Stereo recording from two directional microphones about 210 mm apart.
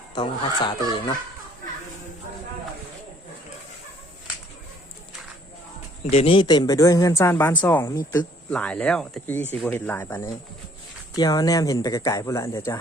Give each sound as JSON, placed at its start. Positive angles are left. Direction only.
{"t": 0.1, "sound": "speech", "side_deg": 20}
{"t": 6.1, "sound": "speech", "side_deg": 25}